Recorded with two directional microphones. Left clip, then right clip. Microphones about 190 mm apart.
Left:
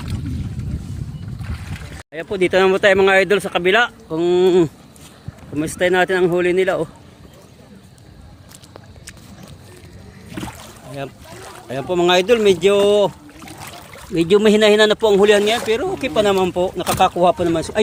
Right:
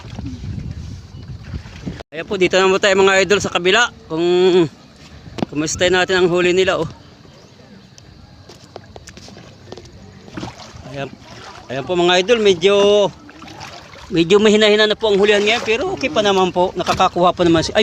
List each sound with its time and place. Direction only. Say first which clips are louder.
2.1 s speech: right 1 dB; 10° right (ahead or behind)
11.7 s speech: right 1 dB; centre (ahead or behind)
14.1 s speech: right 1 dB; 10° right (ahead or behind)
14.8 s speech: left 1 dB; 20° left (ahead or behind); by 17.7 s 30° right (ahead or behind)